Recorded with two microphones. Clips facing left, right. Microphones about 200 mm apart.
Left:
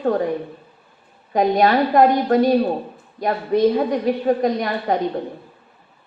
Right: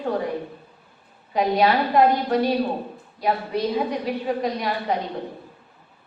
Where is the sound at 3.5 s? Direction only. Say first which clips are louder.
Left 7 dB; 50° left (ahead or behind).